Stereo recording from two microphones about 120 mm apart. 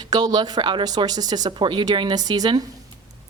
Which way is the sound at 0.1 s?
35° right (ahead or behind).